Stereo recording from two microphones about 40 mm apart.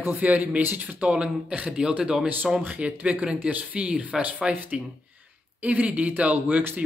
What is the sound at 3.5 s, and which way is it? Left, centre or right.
Speech, right.